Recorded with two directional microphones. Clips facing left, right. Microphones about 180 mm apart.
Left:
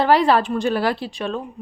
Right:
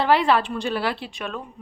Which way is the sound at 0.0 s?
40° left (ahead or behind).